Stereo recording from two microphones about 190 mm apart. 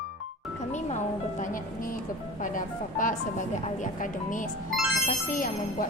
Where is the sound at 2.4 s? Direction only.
45° left (ahead or behind).